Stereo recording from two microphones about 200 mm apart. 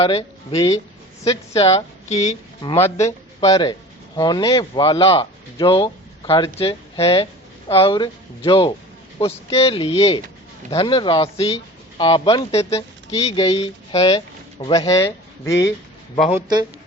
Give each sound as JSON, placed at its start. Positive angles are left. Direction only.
{"t": 0.0, "sound": "speech", "side_deg": 30}
{"t": 0.5, "sound": "speech", "side_deg": 20}
{"t": 1.5, "sound": "a woman's voice", "side_deg": 30}
{"t": 2.6, "sound": "speech", "side_deg": 15}
{"t": 14.6, "sound": "speech", "side_deg": 20}